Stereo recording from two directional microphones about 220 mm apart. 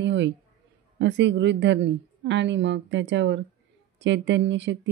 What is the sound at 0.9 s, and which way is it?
Speech, 55° right (ahead or behind).